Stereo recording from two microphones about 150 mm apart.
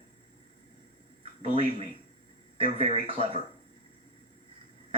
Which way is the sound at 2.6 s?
35° right (ahead or behind).